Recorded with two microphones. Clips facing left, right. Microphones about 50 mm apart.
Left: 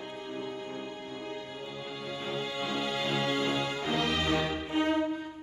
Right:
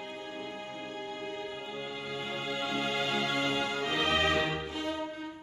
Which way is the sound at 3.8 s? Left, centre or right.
Right.